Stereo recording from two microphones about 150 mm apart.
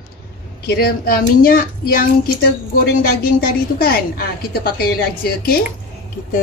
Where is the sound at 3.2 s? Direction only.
80° left.